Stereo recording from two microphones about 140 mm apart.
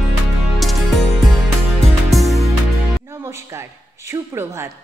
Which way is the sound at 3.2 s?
20° right (ahead or behind).